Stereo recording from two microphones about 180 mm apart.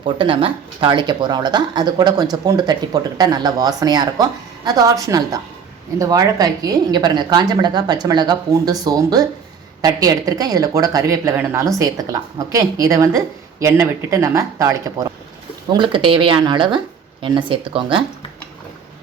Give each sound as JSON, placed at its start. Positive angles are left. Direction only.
{"t": 0.2, "sound": "speech", "side_deg": -30}